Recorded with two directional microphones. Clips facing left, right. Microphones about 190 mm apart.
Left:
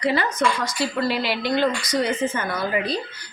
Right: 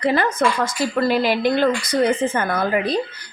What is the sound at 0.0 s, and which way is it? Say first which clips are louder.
A woman's voice: right 3 dB; 50° right (ahead or behind).